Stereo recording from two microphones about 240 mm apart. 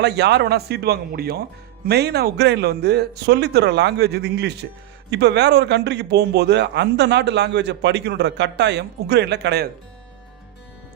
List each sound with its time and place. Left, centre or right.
0.0 s speech: right